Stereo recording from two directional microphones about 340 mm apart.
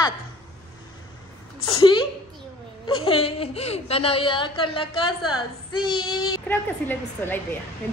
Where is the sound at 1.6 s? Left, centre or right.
Centre.